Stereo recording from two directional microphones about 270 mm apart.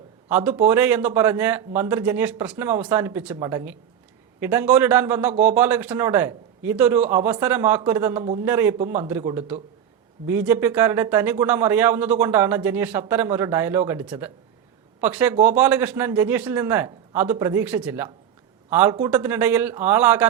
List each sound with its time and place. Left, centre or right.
0.3 s speech: centre